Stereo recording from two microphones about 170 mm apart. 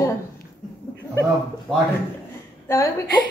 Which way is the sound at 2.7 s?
20° left (ahead or behind).